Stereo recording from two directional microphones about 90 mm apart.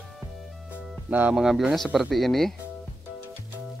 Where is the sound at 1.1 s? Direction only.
15° right (ahead or behind).